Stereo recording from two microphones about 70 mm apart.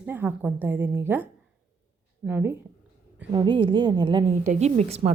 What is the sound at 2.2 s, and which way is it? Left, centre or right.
Speech, centre.